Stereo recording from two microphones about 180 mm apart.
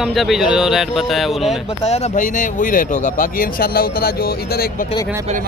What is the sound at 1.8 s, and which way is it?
Speech, 35° left (ahead or behind).